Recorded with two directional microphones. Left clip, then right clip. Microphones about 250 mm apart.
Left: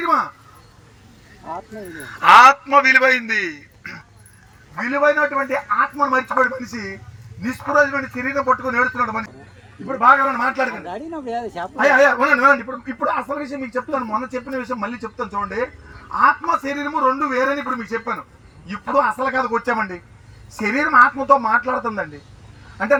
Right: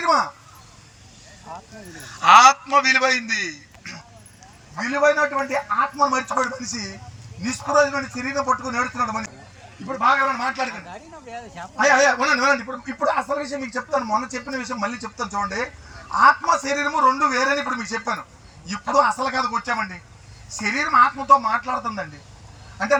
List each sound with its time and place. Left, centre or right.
0.0 s crow: centre
2.0 s a man's voice: centre
10.8 s speech: left
11.8 s a man's voice: centre